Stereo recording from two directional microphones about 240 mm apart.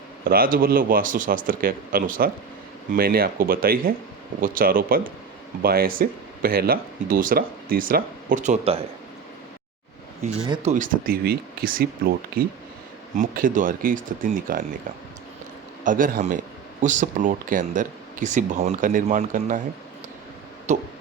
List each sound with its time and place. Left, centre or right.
0.3 s speech: right
10.5 s speech: right
13.1 s speech: right
15.8 s speech: right
20.7 s a sound: right